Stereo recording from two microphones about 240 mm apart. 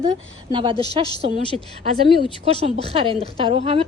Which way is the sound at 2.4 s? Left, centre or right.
Right.